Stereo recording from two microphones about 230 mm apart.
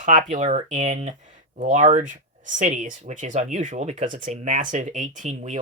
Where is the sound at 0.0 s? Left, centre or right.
Right.